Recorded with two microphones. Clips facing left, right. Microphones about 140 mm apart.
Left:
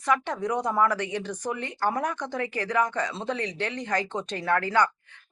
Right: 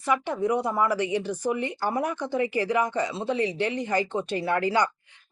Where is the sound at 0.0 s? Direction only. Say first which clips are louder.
Right 1 dB; 5° right (ahead or behind).